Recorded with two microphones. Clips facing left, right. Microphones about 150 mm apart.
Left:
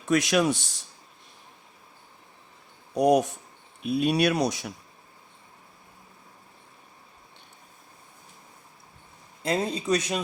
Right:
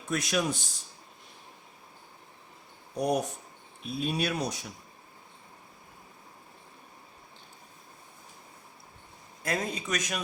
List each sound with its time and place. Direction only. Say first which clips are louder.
0.0 s a man's voice: left 7 dB; 85° left
2.9 s speech: left 8 dB; 90° left
3.8 s speech: left 8 dB; 70° left (ahead or behind)
9.4 s speech: left 5 dB; 25° left (ahead or behind)